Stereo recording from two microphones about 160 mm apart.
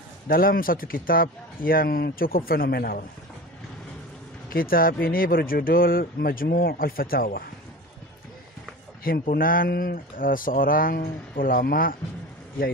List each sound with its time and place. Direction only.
0.3 s speech: 65° left (ahead or behind)
4.5 s speech: 65° left (ahead or behind)
9.0 s speech: 70° left (ahead or behind)